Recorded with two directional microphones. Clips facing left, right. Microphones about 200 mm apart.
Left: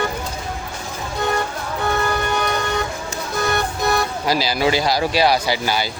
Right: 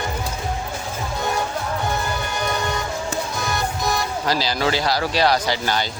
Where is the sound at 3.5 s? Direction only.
60° left (ahead or behind).